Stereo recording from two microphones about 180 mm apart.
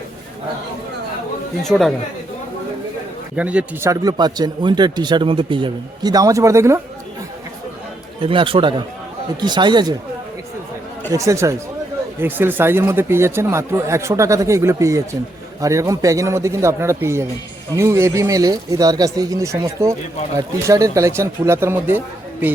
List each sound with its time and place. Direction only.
1.7 s speech: 5° right (ahead or behind)
3.3 s speech: 5° right (ahead or behind)
8.2 s speech: 30° right (ahead or behind)
11.1 s speech: 15° right (ahead or behind)